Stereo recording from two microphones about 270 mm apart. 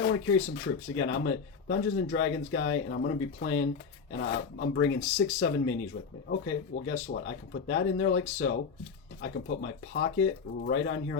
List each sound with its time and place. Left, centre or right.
0.0 s speech: left